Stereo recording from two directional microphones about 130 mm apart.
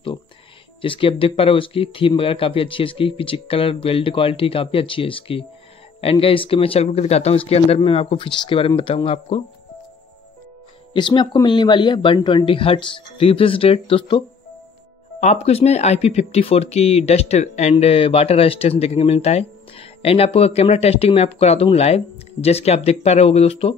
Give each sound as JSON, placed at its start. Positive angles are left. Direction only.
{"t": 0.8, "sound": "speech", "side_deg": 40}
{"t": 10.9, "sound": "speech", "side_deg": 40}
{"t": 15.1, "sound": "speech", "side_deg": 60}